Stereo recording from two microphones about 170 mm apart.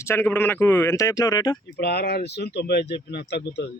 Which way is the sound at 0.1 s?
10° left (ahead or behind).